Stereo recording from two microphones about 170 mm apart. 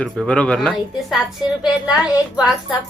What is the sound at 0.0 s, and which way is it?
Speech, 5° left (ahead or behind).